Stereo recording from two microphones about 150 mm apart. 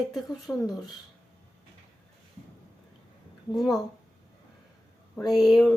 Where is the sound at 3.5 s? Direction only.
Centre (ahead or behind).